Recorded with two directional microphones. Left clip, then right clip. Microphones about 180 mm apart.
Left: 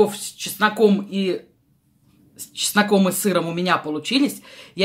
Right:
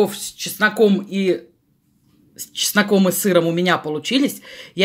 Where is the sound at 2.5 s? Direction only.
30° right (ahead or behind).